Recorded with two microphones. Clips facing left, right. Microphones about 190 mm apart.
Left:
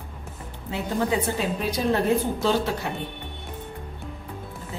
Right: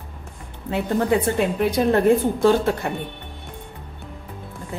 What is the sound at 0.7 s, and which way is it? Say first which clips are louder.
A woman's voice: right 5 dB; 60° right (ahead or behind).